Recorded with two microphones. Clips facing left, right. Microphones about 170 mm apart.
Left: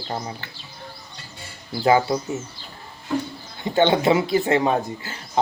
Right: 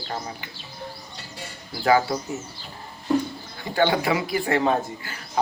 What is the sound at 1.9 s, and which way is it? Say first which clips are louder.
Speech: left 2 dB; 20° left (ahead or behind).